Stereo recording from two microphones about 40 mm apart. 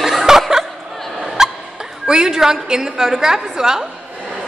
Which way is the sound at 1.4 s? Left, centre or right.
Centre.